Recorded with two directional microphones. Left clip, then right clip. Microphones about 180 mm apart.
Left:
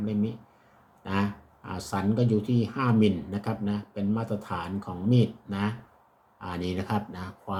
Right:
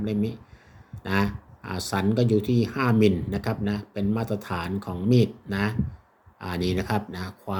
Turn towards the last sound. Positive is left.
turn(degrees=-45)  # may be behind; listen again after turning